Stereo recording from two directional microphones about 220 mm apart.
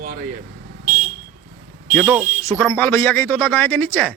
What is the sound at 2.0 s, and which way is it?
A man's voice, centre (ahead or behind).